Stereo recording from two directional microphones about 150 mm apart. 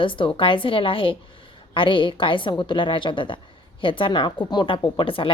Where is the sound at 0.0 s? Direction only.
35° left (ahead or behind).